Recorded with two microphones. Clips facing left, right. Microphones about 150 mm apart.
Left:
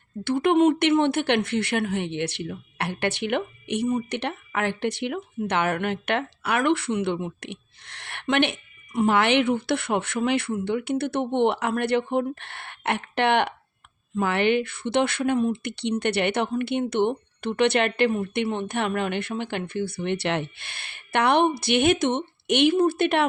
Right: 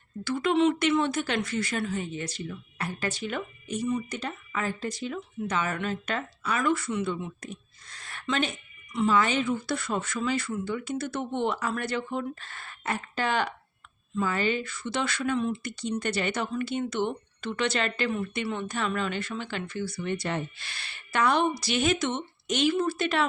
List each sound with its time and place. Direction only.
0.3 s speech: 55° left (ahead or behind)
8.9 s speech: 50° left (ahead or behind)
9.1 s speech: 75° left (ahead or behind); by 15.7 s 50° left (ahead or behind)
15.7 s speech: 65° left (ahead or behind)